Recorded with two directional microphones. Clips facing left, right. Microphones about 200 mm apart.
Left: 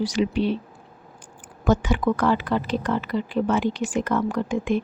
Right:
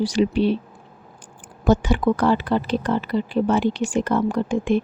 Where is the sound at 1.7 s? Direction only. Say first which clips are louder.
Right 3 dB; 30° right (ahead or behind).